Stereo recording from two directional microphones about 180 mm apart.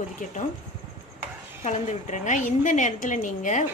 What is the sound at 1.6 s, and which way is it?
Speech, 40° left (ahead or behind).